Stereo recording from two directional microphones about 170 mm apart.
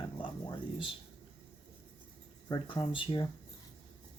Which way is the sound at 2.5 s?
30° left (ahead or behind).